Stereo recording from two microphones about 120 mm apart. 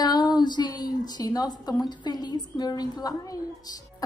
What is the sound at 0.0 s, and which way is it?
A woman's voice, 35° left (ahead or behind).